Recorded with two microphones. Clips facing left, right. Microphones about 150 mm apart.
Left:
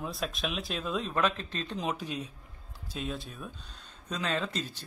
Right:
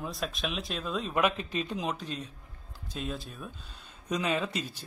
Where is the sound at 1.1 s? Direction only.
10° right (ahead or behind).